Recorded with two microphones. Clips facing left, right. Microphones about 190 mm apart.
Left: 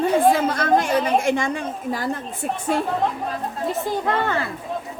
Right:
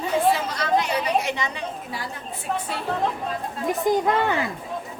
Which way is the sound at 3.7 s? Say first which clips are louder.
Right 3 dB; 15° right (ahead or behind).